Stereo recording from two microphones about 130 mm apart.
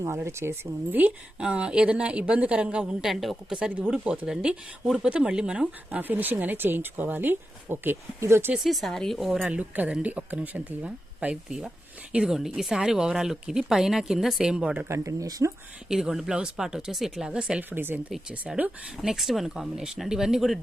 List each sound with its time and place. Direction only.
0.0 s speech: 20° right (ahead or behind)
8.5 s speech: centre (ahead or behind)
14.8 s speech: 25° right (ahead or behind)
15.9 s speech: 5° right (ahead or behind)